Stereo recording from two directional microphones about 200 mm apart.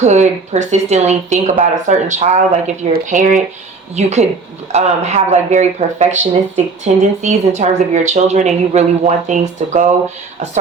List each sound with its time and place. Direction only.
0.0 s speech: 35° right (ahead or behind)